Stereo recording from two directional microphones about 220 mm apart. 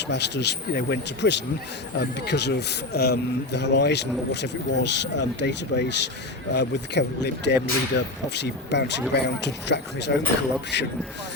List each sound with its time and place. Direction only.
0.1 s speech: 50° left (ahead or behind)